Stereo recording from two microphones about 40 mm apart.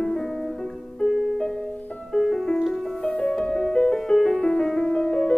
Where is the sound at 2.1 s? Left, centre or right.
Centre.